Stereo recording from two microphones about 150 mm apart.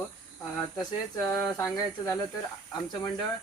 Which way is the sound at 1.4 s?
25° left (ahead or behind).